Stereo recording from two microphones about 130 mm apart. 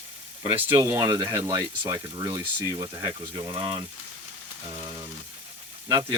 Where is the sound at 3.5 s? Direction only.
40° right (ahead or behind).